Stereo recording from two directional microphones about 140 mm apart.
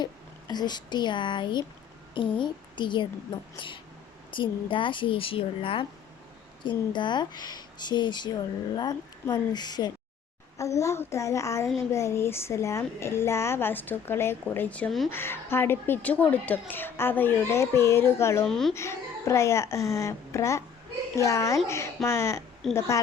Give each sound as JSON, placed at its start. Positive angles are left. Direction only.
{"t": 0.0, "sound": "a child's voice", "side_deg": 30}
{"t": 15.1, "sound": "a woman's voice", "side_deg": 15}
{"t": 18.4, "sound": "speech", "side_deg": 0}
{"t": 18.7, "sound": "a child's voice", "side_deg": 20}
{"t": 22.6, "sound": "speech", "side_deg": 0}